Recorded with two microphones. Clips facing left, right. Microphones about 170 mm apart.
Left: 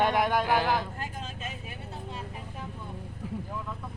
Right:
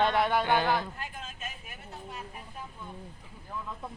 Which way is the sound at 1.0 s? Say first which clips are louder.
Left 3 dB; 30° left (ahead or behind).